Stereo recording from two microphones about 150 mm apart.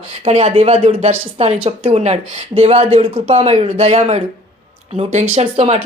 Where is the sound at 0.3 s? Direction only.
45° right (ahead or behind).